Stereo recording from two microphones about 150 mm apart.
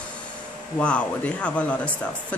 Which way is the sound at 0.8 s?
10° left (ahead or behind).